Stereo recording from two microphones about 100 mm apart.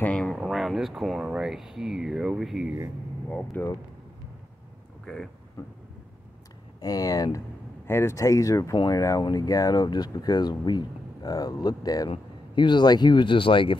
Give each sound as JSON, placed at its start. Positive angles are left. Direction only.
{"t": 0.0, "sound": "a sound", "side_deg": 15}
{"t": 0.4, "sound": "speech", "side_deg": 0}
{"t": 3.6, "sound": "speech", "side_deg": 20}
{"t": 5.0, "sound": "speech", "side_deg": 5}
{"t": 5.6, "sound": "speech", "side_deg": 35}
{"t": 6.8, "sound": "speech", "side_deg": 35}
{"t": 7.3, "sound": "speech", "side_deg": 25}